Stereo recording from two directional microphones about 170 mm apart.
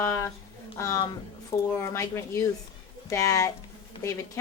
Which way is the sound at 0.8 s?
20° left (ahead or behind).